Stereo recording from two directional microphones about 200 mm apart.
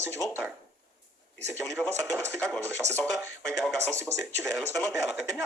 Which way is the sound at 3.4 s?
5° left (ahead or behind).